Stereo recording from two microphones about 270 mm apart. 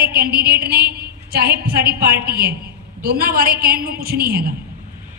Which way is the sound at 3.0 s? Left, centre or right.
Right.